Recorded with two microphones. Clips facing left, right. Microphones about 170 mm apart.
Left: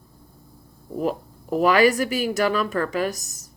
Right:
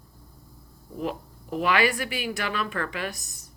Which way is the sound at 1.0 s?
40° left (ahead or behind).